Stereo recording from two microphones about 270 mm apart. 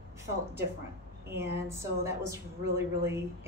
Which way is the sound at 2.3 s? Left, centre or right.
Centre.